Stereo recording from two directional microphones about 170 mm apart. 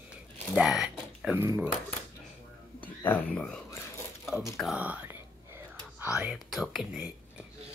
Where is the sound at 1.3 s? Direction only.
15° right (ahead or behind).